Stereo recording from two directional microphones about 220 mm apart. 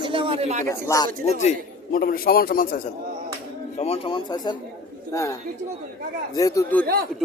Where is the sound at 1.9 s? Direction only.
45° left (ahead or behind).